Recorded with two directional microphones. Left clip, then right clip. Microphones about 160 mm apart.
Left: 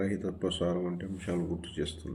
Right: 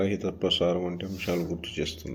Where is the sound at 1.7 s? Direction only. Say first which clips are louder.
Right 5 dB; 15° right (ahead or behind).